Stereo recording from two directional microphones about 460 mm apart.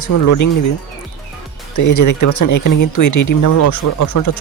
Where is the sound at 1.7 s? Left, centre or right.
Left.